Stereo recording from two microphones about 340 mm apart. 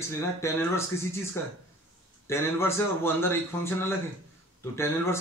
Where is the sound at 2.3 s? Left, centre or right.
Centre.